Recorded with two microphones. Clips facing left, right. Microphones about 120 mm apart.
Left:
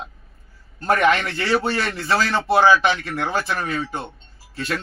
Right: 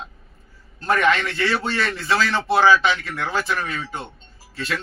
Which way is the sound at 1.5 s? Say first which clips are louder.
Left 3 dB; 50° left (ahead or behind).